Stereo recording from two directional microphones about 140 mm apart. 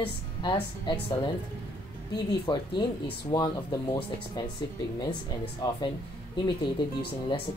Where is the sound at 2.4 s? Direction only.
30° left (ahead or behind).